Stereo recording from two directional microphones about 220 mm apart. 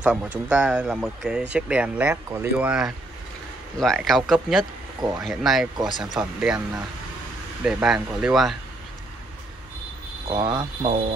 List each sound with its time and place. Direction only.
0.0 s speech: 5° right (ahead or behind)
7.6 s speech: 5° right (ahead or behind)
10.3 s speech: 20° right (ahead or behind)